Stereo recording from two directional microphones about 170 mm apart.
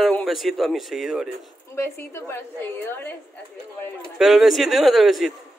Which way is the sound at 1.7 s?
15° left (ahead or behind).